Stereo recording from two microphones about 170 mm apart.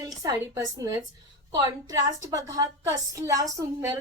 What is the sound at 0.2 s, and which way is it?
A woman's voice, 20° right (ahead or behind).